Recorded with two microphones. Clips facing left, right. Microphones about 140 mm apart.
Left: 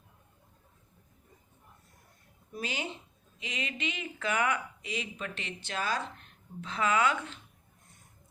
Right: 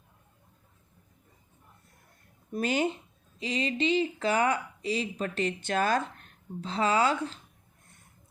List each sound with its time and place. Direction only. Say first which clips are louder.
2.5 s speech: right 10 dB; 50° right (ahead or behind)
3.3 s speech: right 9 dB; 35° right (ahead or behind)